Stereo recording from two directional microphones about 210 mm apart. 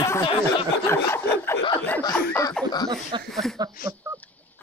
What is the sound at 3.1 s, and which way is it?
Speech, 20° right (ahead or behind).